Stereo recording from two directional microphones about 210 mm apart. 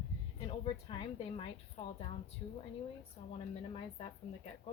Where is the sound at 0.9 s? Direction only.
25° left (ahead or behind).